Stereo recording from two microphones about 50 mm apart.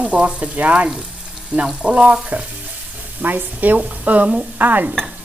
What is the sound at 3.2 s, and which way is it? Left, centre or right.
Speech, right.